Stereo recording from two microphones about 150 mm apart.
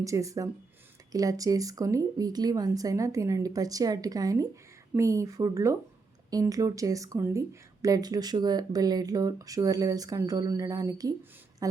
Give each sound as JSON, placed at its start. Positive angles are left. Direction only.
{"t": 0.0, "sound": "speech", "side_deg": -20}